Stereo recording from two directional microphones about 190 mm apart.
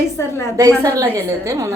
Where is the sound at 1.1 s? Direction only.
15° right (ahead or behind).